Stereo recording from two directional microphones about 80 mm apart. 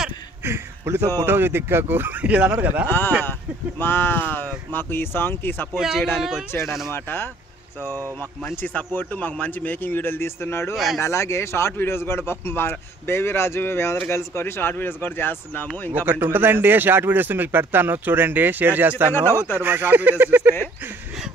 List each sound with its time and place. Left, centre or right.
0.5 s a sound: right
1.2 s speech: right
2.3 s speech: centre
2.9 s a man's voice: left
5.8 s speech: centre
6.9 s a man's voice: left
8.5 s a man's voice: left
10.7 s speech: centre
11.0 s a man's voice: left
15.9 s speech: right
19.1 s a man's voice: left
19.6 s speech: right